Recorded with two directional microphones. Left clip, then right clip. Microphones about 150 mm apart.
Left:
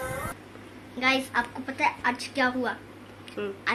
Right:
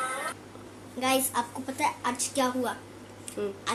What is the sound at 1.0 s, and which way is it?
A woman's voice, 10° right (ahead or behind).